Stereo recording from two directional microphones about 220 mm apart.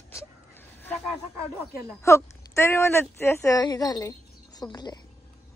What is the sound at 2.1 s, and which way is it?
Speech, 10° left (ahead or behind).